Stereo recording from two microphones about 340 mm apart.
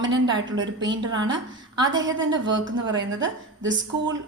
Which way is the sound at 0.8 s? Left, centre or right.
Centre.